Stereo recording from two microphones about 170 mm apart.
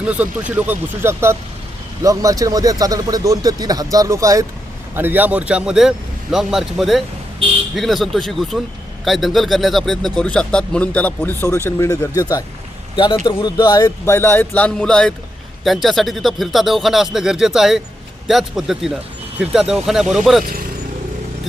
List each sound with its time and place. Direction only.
0.0 s speech: 10° right (ahead or behind)
20.4 s speech: 55° right (ahead or behind)